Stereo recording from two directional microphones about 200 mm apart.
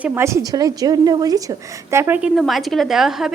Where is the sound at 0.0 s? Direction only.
10° right (ahead or behind).